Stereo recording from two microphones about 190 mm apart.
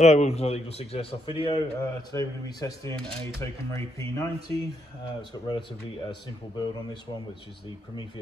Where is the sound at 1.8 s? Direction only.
20° left (ahead or behind).